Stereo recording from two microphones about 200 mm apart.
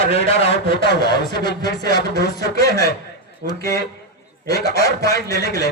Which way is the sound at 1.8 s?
55° right (ahead or behind).